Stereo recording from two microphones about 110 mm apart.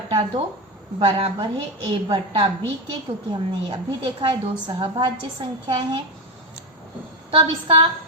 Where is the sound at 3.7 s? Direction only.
40° right (ahead or behind).